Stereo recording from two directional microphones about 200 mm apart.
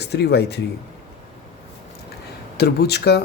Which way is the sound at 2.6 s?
55° left (ahead or behind).